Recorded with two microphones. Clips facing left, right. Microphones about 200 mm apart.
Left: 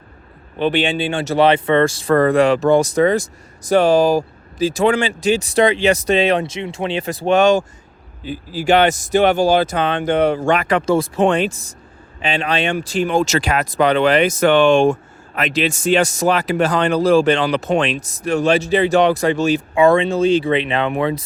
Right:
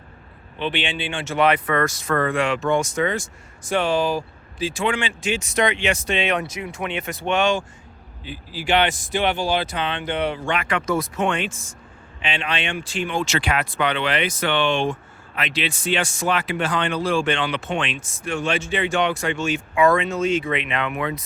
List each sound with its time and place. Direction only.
0.6 s speech: 40° left (ahead or behind)